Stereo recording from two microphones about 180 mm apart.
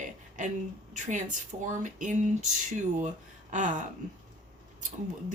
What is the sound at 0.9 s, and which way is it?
Speech, 45° right (ahead or behind).